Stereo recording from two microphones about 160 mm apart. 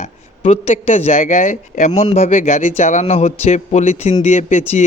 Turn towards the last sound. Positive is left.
turn(degrees=45)  # may be behind; listen again after turning